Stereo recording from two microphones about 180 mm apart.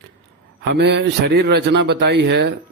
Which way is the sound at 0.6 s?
70° right (ahead or behind).